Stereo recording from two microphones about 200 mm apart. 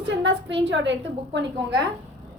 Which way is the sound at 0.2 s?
65° right (ahead or behind).